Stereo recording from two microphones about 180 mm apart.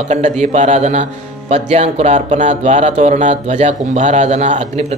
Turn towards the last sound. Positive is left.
turn(degrees=-40)  # may be behind; listen again after turning